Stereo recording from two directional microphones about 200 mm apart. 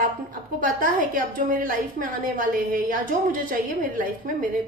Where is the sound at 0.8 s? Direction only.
45° right (ahead or behind).